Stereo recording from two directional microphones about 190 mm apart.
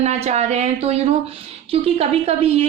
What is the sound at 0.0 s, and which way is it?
A woman's voice, 35° right (ahead or behind).